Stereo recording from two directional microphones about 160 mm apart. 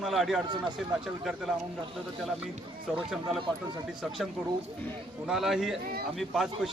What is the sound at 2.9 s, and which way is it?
Speech, 5° right (ahead or behind).